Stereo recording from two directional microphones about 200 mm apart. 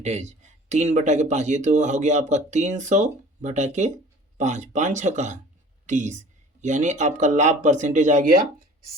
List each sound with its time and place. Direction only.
0.0 s a woman's voice: 35° right (ahead or behind)